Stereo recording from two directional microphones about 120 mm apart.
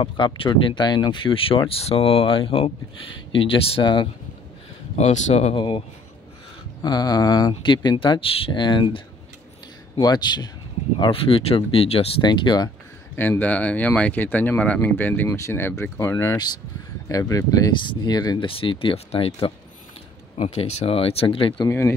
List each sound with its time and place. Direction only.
0.0 s speech: 45° left (ahead or behind)
4.9 s speech: 75° left (ahead or behind)
5.6 s speech: 45° left (ahead or behind)
11.0 s speech: 50° left (ahead or behind)
12.2 s speech: 40° left (ahead or behind)
13.1 s speech: 15° left (ahead or behind); by 18.5 s 35° left (ahead or behind)
18.5 s speech: 50° left (ahead or behind)
20.3 s speech: 60° left (ahead or behind)
21.6 s speech: 20° left (ahead or behind)